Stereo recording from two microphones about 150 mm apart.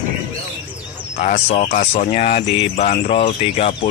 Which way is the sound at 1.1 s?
50° left (ahead or behind).